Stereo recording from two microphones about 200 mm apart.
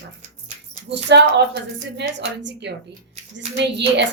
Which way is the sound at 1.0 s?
60° right (ahead or behind).